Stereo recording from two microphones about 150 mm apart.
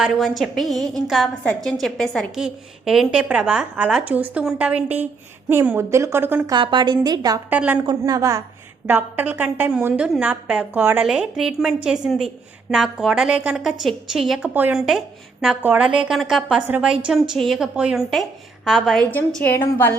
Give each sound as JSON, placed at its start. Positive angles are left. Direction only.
{"t": 0.0, "sound": "a woman's voice", "side_deg": 0}
{"t": 6.5, "sound": "a woman's voice", "side_deg": -30}
{"t": 7.5, "sound": "a woman's voice", "side_deg": -10}
{"t": 7.9, "sound": "a woman's voice", "side_deg": -25}
{"t": 8.9, "sound": "a woman's voice", "side_deg": -10}
{"t": 19.1, "sound": "a woman's voice", "side_deg": 10}